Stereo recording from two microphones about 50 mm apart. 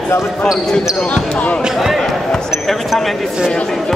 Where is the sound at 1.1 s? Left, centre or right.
Left.